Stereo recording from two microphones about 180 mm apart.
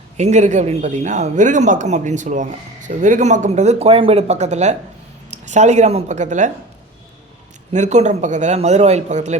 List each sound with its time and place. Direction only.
0.2 s a man's voice: 40° right (ahead or behind)
7.7 s a man's voice: 40° right (ahead or behind)